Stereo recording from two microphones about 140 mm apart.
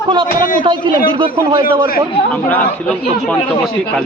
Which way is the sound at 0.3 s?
75° left (ahead or behind).